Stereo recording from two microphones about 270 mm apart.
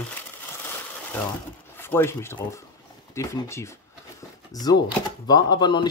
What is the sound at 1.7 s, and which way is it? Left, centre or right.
Speech, centre.